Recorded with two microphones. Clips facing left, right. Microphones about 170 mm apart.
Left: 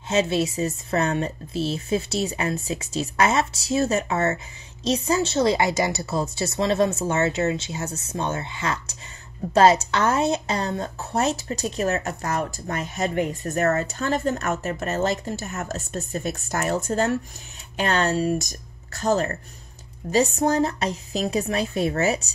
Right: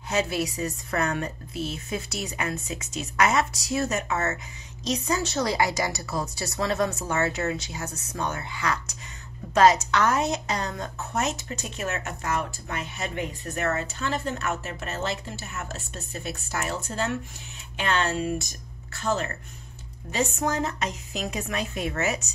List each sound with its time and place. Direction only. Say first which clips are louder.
0.1 s a woman's voice: left 5 dB; 25° left (ahead or behind)